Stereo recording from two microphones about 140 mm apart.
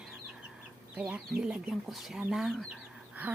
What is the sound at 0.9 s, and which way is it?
A woman's voice, 10° right (ahead or behind).